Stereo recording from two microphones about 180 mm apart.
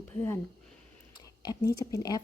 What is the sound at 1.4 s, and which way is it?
Speech, 20° left (ahead or behind).